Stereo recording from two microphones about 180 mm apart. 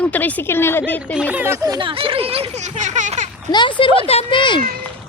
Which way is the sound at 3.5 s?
25° left (ahead or behind).